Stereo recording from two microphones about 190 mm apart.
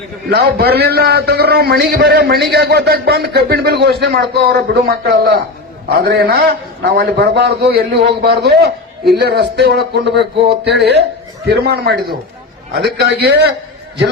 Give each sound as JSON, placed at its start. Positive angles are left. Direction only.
{"t": 0.3, "sound": "a man's voice", "side_deg": -55}